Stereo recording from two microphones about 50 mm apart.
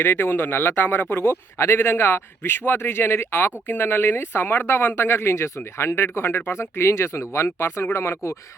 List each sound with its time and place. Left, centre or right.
0.0 s speech: left